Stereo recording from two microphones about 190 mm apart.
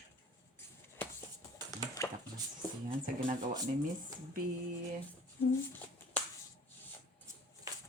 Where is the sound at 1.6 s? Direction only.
15° left (ahead or behind).